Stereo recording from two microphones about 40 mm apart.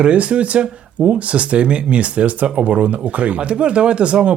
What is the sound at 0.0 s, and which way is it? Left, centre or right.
Speech, right.